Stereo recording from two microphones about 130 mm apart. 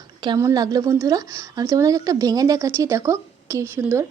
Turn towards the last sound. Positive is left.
turn(degrees=-20)  # may be behind; listen again after turning